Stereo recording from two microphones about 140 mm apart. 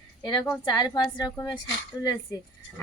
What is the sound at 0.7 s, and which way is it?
Speech, 30° left (ahead or behind).